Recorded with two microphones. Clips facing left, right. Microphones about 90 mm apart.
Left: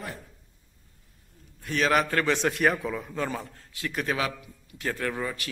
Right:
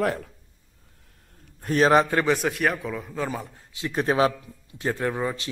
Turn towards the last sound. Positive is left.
turn(degrees=-25)  # may be behind; listen again after turning